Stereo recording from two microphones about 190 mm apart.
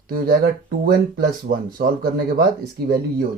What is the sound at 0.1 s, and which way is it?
Speech, 50° right (ahead or behind).